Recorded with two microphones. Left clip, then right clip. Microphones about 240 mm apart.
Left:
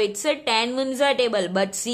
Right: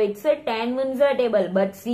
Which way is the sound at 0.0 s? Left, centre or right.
Left.